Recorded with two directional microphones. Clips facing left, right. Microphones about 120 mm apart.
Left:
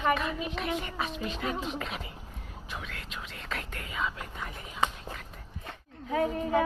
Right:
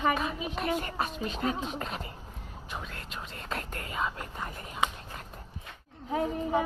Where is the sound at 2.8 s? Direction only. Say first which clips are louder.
Even; 40° right (ahead or behind).